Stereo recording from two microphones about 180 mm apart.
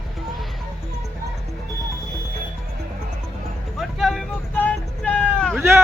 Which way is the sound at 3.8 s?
Centre (ahead or behind).